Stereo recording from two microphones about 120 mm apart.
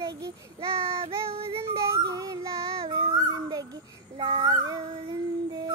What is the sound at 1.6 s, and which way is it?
Yodeling, 25° right (ahead or behind).